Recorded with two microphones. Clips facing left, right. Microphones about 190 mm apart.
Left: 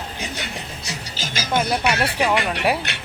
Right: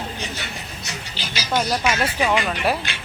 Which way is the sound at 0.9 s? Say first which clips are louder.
Left 2 dB; 45° left (ahead or behind).